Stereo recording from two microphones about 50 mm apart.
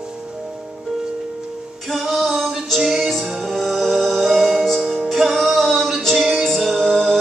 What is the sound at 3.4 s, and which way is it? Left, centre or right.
Music, centre.